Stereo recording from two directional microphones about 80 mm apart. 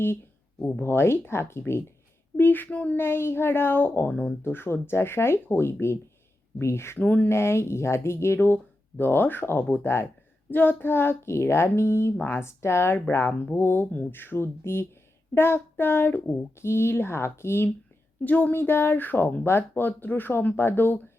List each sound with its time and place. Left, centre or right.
0.8 s speech: left
7.0 s speech: left
7.3 s speech: left
18.3 s speech: left